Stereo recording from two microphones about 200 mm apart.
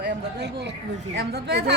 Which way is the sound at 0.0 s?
55° right (ahead or behind).